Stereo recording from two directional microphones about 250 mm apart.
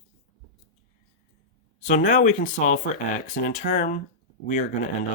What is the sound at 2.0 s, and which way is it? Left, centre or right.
Speech, left.